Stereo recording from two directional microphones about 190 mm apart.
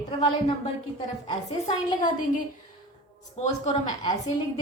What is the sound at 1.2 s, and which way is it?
Speech, 30° left (ahead or behind).